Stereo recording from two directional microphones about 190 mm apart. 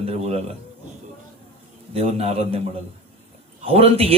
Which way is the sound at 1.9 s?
30° right (ahead or behind).